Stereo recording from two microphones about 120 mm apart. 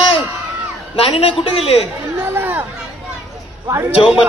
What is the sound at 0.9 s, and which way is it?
Speech, 55° left (ahead or behind).